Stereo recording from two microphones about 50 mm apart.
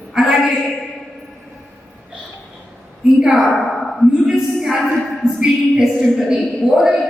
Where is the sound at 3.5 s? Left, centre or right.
Centre.